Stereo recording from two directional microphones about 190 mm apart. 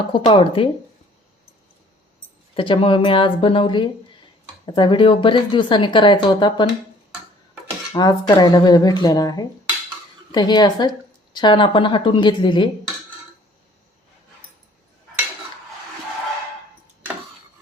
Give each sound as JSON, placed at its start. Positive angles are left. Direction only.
{"t": 0.1, "sound": "speech", "side_deg": 25}
{"t": 2.6, "sound": "speech", "side_deg": 25}
{"t": 7.9, "sound": "speech", "side_deg": 20}